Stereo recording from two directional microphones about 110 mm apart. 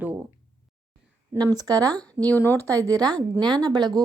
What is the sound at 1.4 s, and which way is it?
Speech, 35° right (ahead or behind).